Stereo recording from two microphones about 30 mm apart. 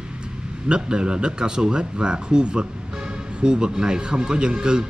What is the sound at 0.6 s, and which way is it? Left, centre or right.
Speech, right.